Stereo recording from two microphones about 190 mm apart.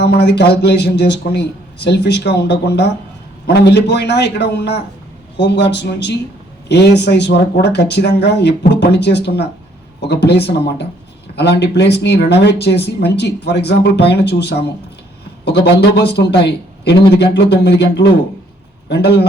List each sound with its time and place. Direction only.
0.0 s speech: 60° left (ahead or behind)